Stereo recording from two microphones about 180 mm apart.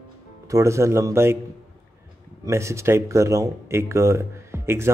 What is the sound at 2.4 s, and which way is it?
A man's voice, 15° right (ahead or behind).